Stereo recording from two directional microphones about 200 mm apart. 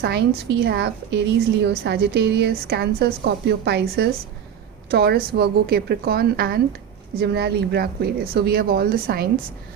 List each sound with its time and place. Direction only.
0.0 s a woman's voice: 55° right (ahead or behind)